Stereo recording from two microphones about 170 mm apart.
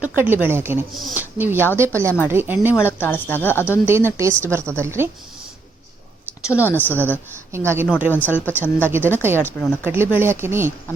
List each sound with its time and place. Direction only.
0.2 s speech: 10° right (ahead or behind)
2.8 s speech: 10° left (ahead or behind)
3.8 s speech: 15° right (ahead or behind)
6.6 s speech: 10° left (ahead or behind)
7.5 s speech: 15° right (ahead or behind)
8.1 s speech: 10° left (ahead or behind)
9.8 s speech: 10° right (ahead or behind)